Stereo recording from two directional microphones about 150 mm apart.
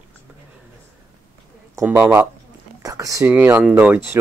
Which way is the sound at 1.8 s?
15° right (ahead or behind).